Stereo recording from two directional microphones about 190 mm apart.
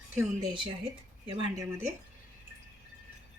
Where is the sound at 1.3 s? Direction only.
15° right (ahead or behind).